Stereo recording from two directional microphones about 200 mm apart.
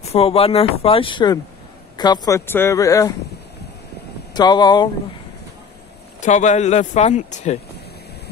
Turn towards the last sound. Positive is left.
turn(degrees=35)  # may be behind; listen again after turning